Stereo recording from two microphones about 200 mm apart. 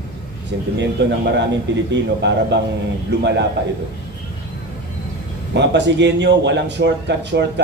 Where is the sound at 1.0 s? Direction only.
60° right (ahead or behind).